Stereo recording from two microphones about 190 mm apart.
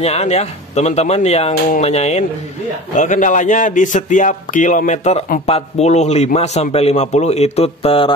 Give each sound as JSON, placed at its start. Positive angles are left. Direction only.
{"t": 0.0, "sound": "a man's voice", "side_deg": 35}